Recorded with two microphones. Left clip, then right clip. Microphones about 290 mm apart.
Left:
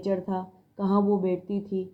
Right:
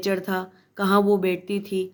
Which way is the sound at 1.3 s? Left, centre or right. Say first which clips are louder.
Right 4 dB; right.